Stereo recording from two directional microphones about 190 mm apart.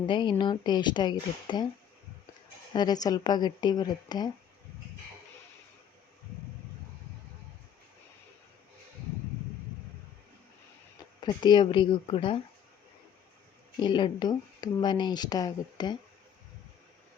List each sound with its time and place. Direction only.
0.1 s speech: 25° left (ahead or behind)
2.7 s speech: 20° left (ahead or behind)
11.2 s speech: 20° left (ahead or behind)
13.7 s speech: 25° left (ahead or behind)